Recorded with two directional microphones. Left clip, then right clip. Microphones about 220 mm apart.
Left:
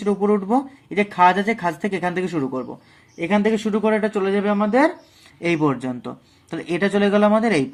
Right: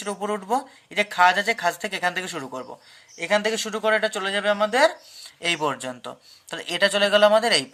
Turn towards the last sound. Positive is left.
turn(degrees=-40)  # may be behind; listen again after turning